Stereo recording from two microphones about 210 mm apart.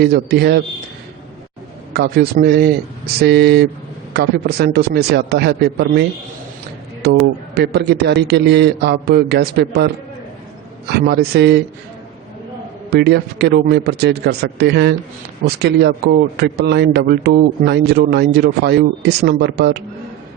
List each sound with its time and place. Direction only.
0.0 s a man's voice: 50° right (ahead or behind)
1.9 s a man's voice: 50° right (ahead or behind)
12.9 s a man's voice: 50° right (ahead or behind)